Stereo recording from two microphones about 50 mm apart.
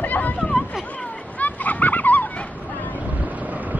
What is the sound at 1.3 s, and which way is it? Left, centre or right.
Fowl, left.